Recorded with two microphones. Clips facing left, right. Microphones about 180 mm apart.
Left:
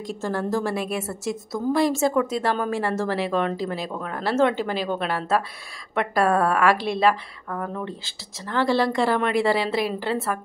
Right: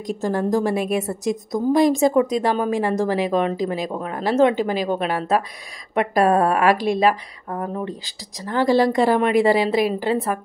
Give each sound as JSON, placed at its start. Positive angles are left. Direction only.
{"t": 0.0, "sound": "a woman's voice", "side_deg": -15}
{"t": 8.4, "sound": "a woman's voice", "side_deg": -15}